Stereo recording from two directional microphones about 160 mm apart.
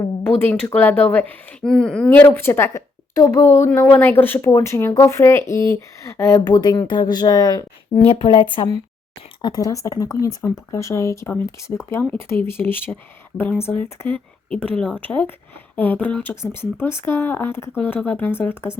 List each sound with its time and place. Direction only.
0.4 s speech: 10° left (ahead or behind)